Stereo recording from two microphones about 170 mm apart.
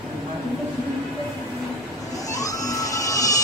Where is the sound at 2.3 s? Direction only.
20° left (ahead or behind).